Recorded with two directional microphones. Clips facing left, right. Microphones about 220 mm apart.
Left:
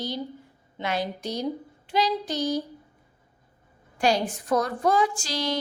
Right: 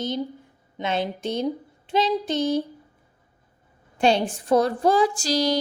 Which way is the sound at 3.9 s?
25° right (ahead or behind).